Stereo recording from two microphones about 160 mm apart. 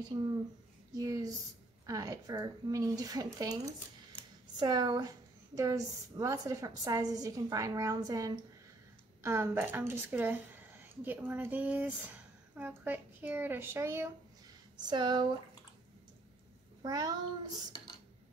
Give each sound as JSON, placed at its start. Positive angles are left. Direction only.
{"t": 0.1, "sound": "a woman's voice", "side_deg": -25}
{"t": 14.9, "sound": "a woman's voice", "side_deg": -30}
{"t": 16.8, "sound": "a woman's voice", "side_deg": -25}